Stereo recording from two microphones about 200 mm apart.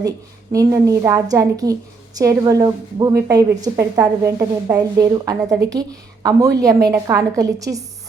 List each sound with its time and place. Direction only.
0.5 s a woman's voice: 15° right (ahead or behind)